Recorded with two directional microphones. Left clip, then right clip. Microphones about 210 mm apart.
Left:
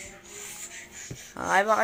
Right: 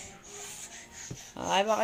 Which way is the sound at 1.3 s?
Centre (ahead or behind).